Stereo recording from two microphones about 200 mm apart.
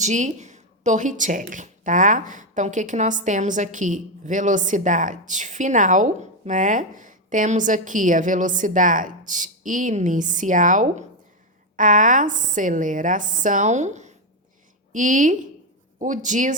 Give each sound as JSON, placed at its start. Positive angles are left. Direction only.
{"t": 0.0, "sound": "speech", "side_deg": -35}